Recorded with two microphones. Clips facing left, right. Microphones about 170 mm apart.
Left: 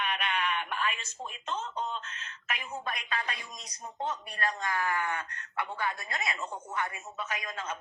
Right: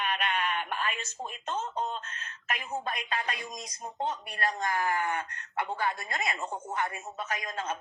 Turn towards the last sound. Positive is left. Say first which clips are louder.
# right 3 dB
turn(degrees=-35)  # may be behind; listen again after turning